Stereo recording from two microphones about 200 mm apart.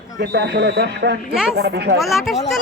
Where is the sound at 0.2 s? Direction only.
55° right (ahead or behind).